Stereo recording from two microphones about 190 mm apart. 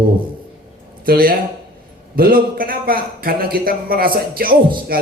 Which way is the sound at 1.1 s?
50° right (ahead or behind).